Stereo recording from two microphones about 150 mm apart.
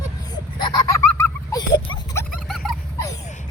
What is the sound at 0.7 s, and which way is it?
Goose, 20° left (ahead or behind).